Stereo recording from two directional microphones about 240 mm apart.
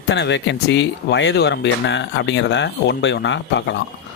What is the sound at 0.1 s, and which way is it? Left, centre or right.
Speech, left.